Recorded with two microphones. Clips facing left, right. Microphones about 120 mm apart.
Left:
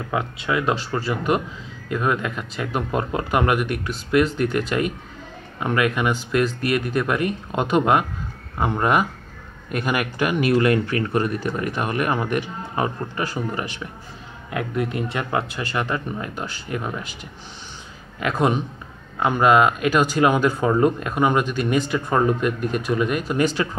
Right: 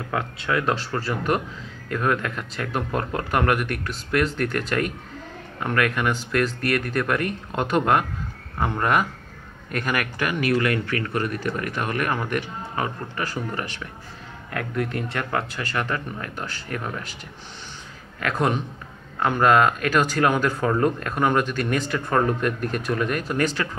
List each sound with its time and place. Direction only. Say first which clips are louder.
0.1 s speech: left 1 dB; 10° left (ahead or behind)
18.2 s speech: left 3 dB; 15° left (ahead or behind)